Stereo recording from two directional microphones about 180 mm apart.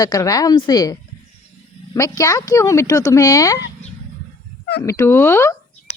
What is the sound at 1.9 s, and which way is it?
Speech, 20° left (ahead or behind).